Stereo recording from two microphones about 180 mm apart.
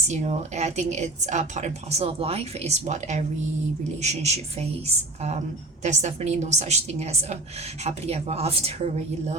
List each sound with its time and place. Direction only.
0.1 s speech: 40° right (ahead or behind)
5.8 s speech: 40° right (ahead or behind)